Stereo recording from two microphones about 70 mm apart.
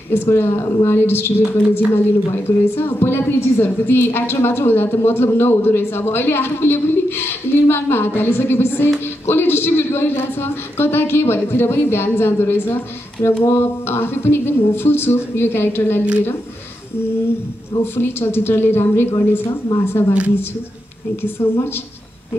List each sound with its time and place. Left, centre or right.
0.1 s a woman's voice: left
17.9 s a woman's voice: left
21.2 s a woman's voice: left